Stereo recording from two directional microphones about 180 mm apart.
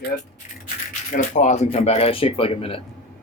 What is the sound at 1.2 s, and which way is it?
Speech, 45° left (ahead or behind).